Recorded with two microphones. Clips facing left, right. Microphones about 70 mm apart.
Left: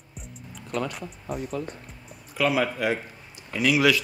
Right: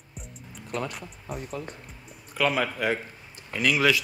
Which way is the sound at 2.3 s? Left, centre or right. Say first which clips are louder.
Left 2 dB; right.